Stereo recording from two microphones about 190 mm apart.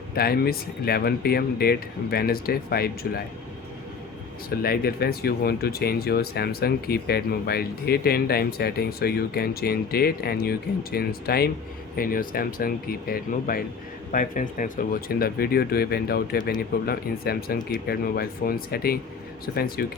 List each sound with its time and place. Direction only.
0.1 s speech: 55° left (ahead or behind)
4.4 s speech: 50° left (ahead or behind)